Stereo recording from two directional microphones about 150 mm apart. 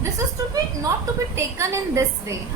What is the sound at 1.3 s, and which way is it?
A woman's voice, 20° right (ahead or behind).